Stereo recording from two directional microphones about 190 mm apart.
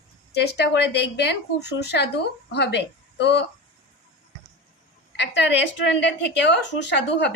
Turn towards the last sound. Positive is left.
turn(degrees=65)  # may be behind; listen again after turning